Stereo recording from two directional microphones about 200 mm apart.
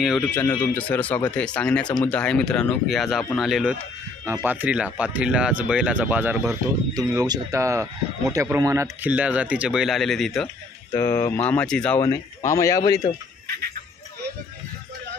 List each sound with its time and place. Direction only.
0.0 s speech: 5° left (ahead or behind)
10.9 s speech: 15° left (ahead or behind)